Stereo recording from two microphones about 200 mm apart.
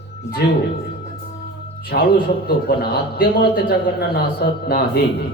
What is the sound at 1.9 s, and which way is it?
Mantra, 45° left (ahead or behind).